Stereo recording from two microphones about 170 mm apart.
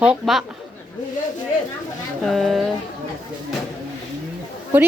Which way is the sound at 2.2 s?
Centre (ahead or behind).